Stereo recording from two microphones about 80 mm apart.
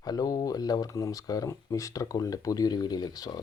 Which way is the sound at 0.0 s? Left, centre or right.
Left.